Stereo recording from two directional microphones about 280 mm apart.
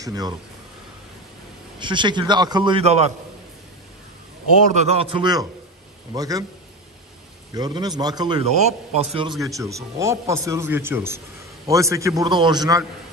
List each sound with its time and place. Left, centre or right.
0.0 s a man's voice: centre
1.8 s a man's voice: centre
4.7 s a man's voice: right
7.5 s a man's voice: centre